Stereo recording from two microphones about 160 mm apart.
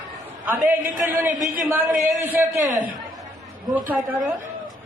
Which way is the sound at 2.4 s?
55° right (ahead or behind).